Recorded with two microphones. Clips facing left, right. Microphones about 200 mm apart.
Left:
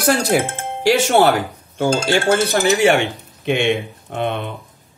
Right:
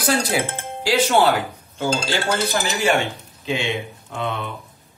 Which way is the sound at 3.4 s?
65° left (ahead or behind).